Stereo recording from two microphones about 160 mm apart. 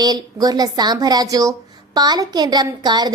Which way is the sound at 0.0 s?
25° right (ahead or behind).